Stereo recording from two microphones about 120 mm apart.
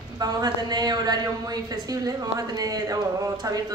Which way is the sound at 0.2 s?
35° right (ahead or behind).